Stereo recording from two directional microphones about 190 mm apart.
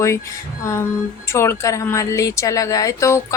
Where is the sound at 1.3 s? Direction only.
15° left (ahead or behind).